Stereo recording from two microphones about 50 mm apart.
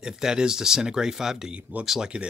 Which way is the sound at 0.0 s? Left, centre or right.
Centre.